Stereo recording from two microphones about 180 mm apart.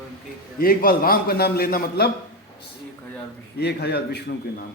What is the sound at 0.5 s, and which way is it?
A man's voice, 55° left (ahead or behind).